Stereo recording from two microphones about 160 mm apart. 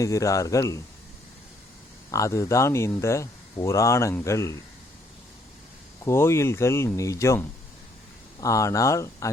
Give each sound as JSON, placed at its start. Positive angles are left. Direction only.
{"t": 0.0, "sound": "speech", "side_deg": 20}
{"t": 2.0, "sound": "speech", "side_deg": 20}
{"t": 6.1, "sound": "speech", "side_deg": 15}